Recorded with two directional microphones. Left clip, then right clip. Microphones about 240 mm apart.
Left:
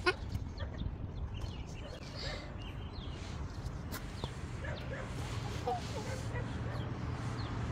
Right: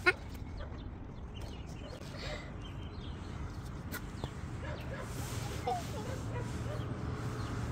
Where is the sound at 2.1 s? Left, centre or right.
Centre.